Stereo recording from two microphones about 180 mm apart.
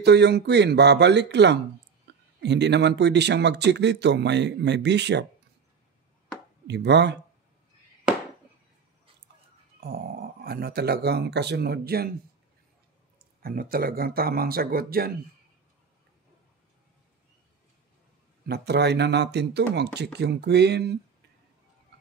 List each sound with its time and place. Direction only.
0.0 s speech: 70° right (ahead or behind)
6.7 s speech: 70° right (ahead or behind)
9.8 s speech: 55° right (ahead or behind)
13.2 s speech: 55° right (ahead or behind)
18.5 s speech: 65° right (ahead or behind)